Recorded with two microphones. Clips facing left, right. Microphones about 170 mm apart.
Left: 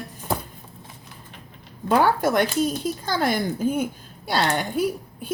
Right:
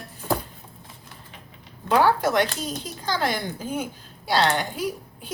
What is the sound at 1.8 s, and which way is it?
Speech, 50° left (ahead or behind).